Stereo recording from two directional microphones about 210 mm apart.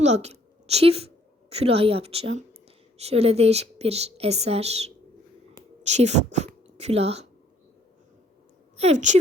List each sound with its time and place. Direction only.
0.0 s a woman's voice: 30° right (ahead or behind)
8.8 s a woman's voice: 35° right (ahead or behind)